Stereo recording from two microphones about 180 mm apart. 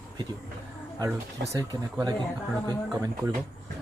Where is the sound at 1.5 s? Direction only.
20° right (ahead or behind).